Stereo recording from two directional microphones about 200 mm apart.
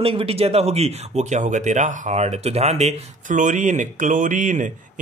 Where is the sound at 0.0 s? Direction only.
30° right (ahead or behind).